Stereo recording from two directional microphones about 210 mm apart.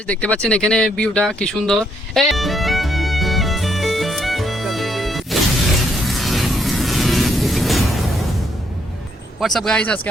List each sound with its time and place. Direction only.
0.1 s speech: 5° left (ahead or behind)
0.4 s a sound: 5° left (ahead or behind)
9.4 s speech: centre (ahead or behind)